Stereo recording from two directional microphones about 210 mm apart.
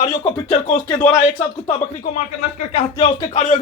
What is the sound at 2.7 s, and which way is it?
Speech, 30° left (ahead or behind).